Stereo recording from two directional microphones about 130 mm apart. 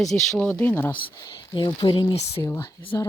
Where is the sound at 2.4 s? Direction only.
20° left (ahead or behind).